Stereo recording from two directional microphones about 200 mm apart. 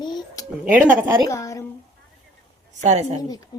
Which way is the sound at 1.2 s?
15° left (ahead or behind).